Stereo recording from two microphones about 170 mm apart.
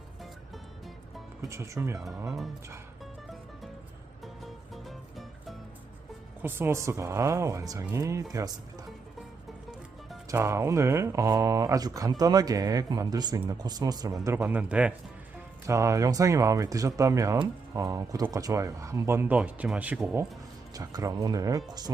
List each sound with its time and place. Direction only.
1.4 s speech: 20° right (ahead or behind)
4.2 s music: centre (ahead or behind)
6.4 s speech: 15° right (ahead or behind)
10.2 s speech: 15° right (ahead or behind)
15.6 s speech: 15° right (ahead or behind)
20.7 s speech: 20° right (ahead or behind)